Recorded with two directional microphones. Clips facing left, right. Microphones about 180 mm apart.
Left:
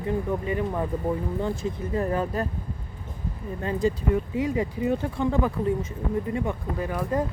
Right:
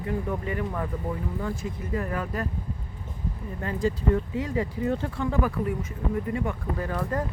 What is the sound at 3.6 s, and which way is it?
Speech, 15° left (ahead or behind).